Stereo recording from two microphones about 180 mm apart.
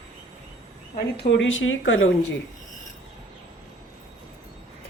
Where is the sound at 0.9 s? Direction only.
65° left (ahead or behind); by 2.1 s 90° left.